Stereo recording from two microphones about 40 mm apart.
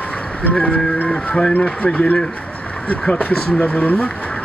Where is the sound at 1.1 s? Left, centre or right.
Left.